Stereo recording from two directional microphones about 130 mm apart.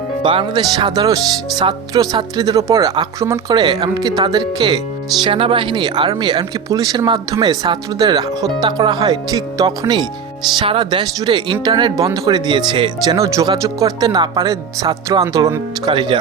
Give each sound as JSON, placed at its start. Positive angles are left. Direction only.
{"t": 0.2, "sound": "speech", "side_deg": -40}
{"t": 13.1, "sound": "speech", "side_deg": -25}
{"t": 15.9, "sound": "speech", "side_deg": -35}